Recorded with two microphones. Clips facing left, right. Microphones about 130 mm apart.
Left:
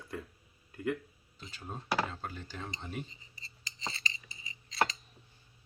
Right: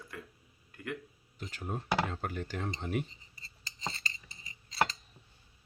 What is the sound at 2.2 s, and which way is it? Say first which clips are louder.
Speech: right 5 dB; 70° right (ahead or behind).